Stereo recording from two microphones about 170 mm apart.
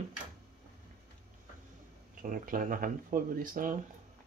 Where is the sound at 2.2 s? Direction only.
55° right (ahead or behind).